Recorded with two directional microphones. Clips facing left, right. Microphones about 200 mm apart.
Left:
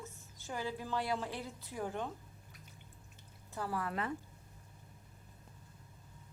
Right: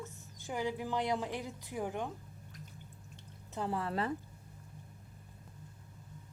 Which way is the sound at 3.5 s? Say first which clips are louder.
Right 3 dB; 20° right (ahead or behind).